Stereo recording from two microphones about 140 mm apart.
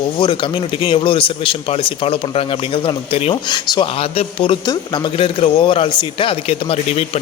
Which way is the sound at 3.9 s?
45° left (ahead or behind).